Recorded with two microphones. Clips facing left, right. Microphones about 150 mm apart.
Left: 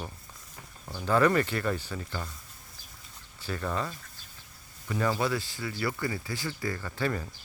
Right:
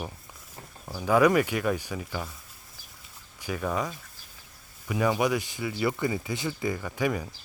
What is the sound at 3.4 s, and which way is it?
Speech, 10° right (ahead or behind).